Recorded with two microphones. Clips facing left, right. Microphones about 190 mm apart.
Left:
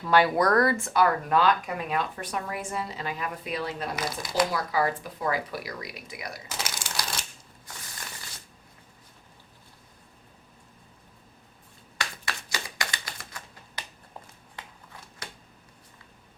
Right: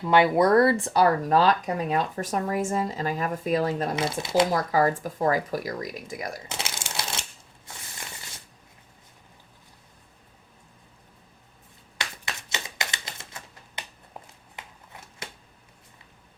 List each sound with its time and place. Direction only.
0.0 s speech: 20° right (ahead or behind); by 3.9 s 45° right (ahead or behind)
3.9 s speech: 25° right (ahead or behind)
4.5 s speech: 45° right (ahead or behind)
6.5 s shuffling cards: 25° right (ahead or behind)
11.9 s typewriter: 20° right (ahead or behind)